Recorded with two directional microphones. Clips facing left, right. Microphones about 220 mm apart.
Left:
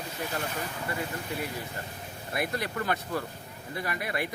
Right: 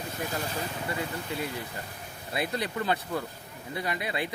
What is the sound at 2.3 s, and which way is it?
Speech, 20° right (ahead or behind).